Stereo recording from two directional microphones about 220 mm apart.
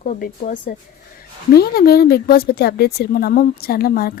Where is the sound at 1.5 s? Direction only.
45° left (ahead or behind).